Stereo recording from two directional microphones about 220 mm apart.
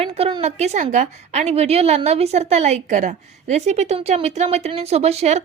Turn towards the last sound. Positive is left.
turn(degrees=-30)  # may be behind; listen again after turning